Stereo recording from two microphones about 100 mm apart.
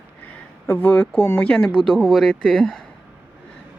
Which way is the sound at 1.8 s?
Centre (ahead or behind).